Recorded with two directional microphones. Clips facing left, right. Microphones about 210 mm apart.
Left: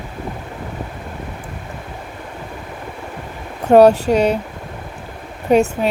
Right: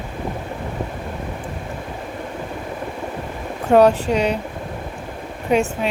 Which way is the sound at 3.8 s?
45° left (ahead or behind).